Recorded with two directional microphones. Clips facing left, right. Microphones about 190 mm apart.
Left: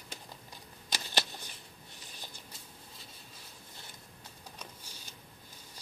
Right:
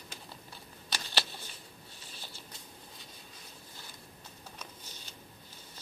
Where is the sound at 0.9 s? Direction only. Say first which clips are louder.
Left 1 dB; 15° left (ahead or behind).